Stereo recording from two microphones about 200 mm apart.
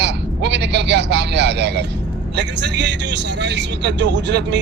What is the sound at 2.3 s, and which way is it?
Speech, 60° right (ahead or behind).